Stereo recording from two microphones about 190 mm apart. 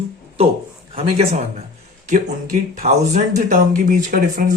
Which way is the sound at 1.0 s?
35° right (ahead or behind).